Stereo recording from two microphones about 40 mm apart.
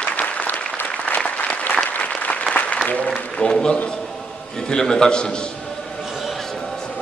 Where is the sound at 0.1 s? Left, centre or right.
Left.